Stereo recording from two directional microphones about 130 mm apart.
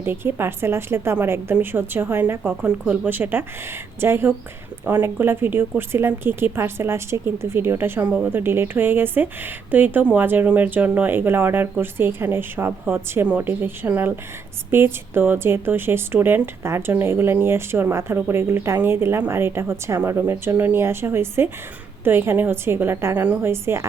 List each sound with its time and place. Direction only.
0.0 s a woman's voice: 15° right (ahead or behind)